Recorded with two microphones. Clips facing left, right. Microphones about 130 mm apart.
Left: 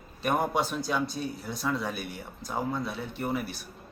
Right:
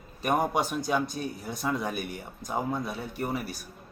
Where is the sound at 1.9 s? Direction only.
50° right (ahead or behind).